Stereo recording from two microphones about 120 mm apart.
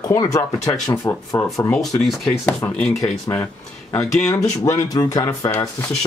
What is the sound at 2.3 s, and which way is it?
Speech, 15° left (ahead or behind).